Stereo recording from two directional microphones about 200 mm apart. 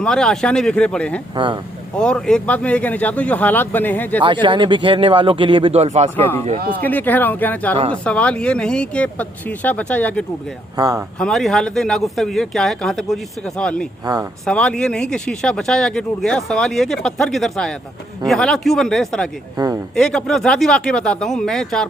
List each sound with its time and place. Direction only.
0.0 s speech: 5° left (ahead or behind)
4.4 s speech: 25° right (ahead or behind)
6.1 s speech: 10° left (ahead or behind)
10.8 s speech: 15° right (ahead or behind)
11.2 s speech: centre (ahead or behind)
14.0 s speech: 20° right (ahead or behind)
14.4 s speech: 5° left (ahead or behind)
19.5 s speech: 15° right (ahead or behind)
20.0 s speech: centre (ahead or behind)